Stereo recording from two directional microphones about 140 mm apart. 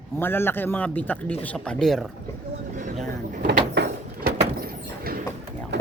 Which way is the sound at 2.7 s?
65° right (ahead or behind).